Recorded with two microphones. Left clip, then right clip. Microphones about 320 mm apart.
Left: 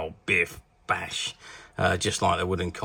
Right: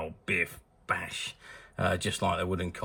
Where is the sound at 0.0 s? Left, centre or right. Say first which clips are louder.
Left 5 dB; centre.